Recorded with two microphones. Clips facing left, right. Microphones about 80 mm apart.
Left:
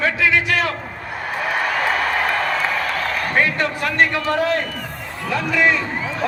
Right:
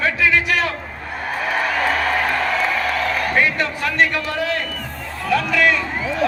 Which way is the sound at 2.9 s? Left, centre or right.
Left.